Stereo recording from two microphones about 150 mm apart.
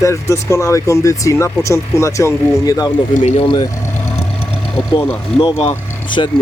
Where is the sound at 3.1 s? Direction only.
50° left (ahead or behind).